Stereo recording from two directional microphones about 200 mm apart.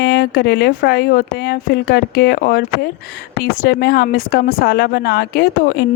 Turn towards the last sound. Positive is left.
turn(degrees=50)  # may be behind; listen again after turning